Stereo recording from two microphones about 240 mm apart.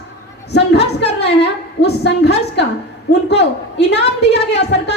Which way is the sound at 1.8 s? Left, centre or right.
Left.